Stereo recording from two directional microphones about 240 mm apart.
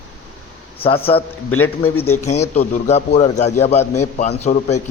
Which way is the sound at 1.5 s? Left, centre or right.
Left.